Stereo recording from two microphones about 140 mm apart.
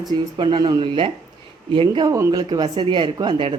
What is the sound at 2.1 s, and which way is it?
Speech, 20° right (ahead or behind).